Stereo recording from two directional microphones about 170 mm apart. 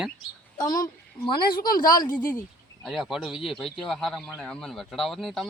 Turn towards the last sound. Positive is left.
turn(degrees=0)  # may be behind; listen again after turning